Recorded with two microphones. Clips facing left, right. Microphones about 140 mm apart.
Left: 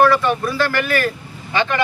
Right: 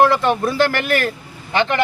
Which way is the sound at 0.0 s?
20° right (ahead or behind).